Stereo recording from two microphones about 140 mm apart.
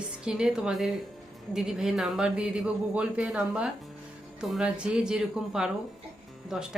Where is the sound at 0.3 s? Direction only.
5° right (ahead or behind).